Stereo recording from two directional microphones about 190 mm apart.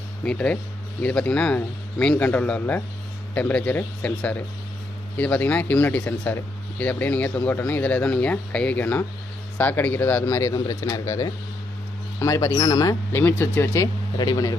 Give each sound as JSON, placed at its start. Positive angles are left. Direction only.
{"t": 0.3, "sound": "speech", "side_deg": 5}